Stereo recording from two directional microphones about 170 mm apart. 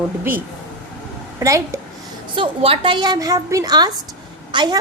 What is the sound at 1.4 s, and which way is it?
Speech, 20° right (ahead or behind).